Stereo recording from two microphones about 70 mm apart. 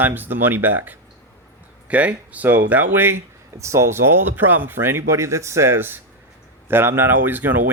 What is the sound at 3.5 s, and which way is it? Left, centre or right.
Speech, right.